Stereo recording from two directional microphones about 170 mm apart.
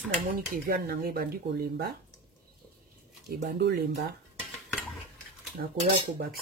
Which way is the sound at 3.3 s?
65° right (ahead or behind).